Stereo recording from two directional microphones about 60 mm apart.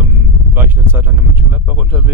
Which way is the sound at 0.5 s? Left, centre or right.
Right.